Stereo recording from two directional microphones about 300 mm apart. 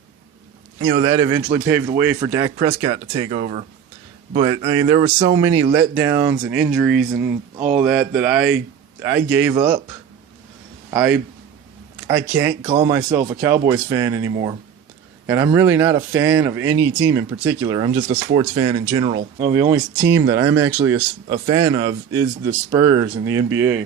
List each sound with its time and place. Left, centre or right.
0.9 s a man's voice: centre
10.9 s a man's voice: centre